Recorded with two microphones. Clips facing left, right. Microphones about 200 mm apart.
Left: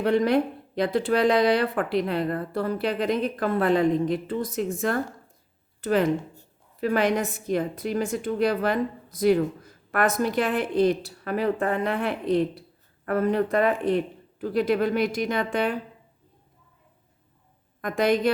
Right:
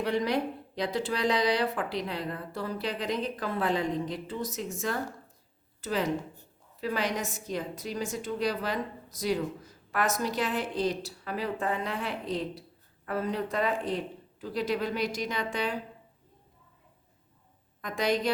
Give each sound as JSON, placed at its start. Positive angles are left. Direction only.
{"t": 0.0, "sound": "a woman's voice", "side_deg": 50}
{"t": 17.7, "sound": "a woman's voice", "side_deg": 55}